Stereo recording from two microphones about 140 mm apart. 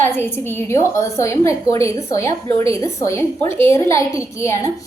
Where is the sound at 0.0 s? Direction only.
15° left (ahead or behind).